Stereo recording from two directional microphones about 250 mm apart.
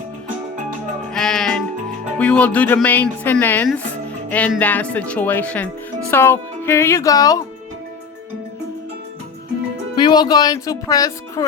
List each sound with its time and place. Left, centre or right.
1.1 s music: centre
2.1 s speech: centre
4.3 s music: centre
9.9 s music: centre